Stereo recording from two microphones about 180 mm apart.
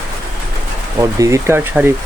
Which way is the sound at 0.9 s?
15° right (ahead or behind).